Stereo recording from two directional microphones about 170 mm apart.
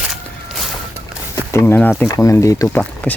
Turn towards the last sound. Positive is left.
turn(degrees=10)  # may be behind; listen again after turning